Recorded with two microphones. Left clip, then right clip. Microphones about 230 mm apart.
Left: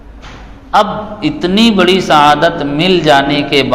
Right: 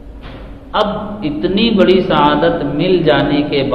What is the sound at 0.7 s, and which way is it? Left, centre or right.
A man's voice, left.